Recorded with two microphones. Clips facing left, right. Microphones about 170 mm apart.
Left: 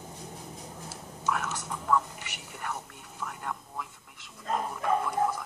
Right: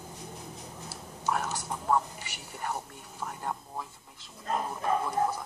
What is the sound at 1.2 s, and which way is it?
Whispering, 35° right (ahead or behind).